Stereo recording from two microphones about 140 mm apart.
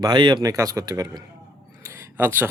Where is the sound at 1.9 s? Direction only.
20° right (ahead or behind).